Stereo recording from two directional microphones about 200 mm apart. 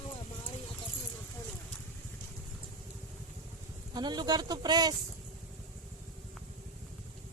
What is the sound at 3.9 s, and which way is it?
Speech, 20° right (ahead or behind).